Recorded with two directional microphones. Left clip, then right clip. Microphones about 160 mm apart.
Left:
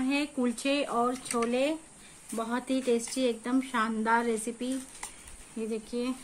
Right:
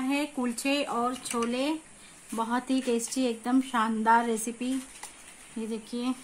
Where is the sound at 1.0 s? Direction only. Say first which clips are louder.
Even; 65° right (ahead or behind); by 4.7 s 50° right (ahead or behind).